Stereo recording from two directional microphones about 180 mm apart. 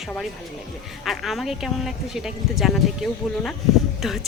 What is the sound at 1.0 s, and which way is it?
A woman's voice, centre (ahead or behind).